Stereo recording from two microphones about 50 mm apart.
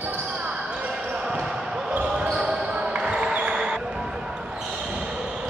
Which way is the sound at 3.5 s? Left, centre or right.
Centre.